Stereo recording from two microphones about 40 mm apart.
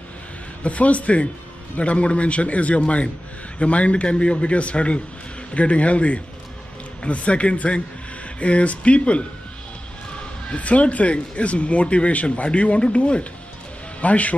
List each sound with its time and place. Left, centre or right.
0.7 s a man's voice: left
10.4 s speech: left